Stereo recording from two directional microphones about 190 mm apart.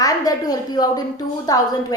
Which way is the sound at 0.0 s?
20° left (ahead or behind).